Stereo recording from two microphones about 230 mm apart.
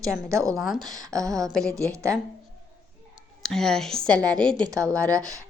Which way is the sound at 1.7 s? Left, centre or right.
Centre.